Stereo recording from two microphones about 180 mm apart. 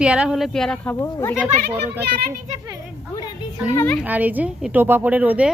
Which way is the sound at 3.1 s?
25° left (ahead or behind).